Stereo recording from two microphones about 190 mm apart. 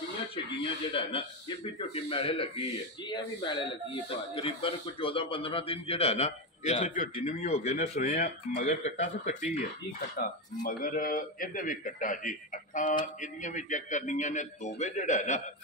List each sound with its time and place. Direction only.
0.5 s speech: 30° left (ahead or behind)
10.1 s speech: 45° left (ahead or behind)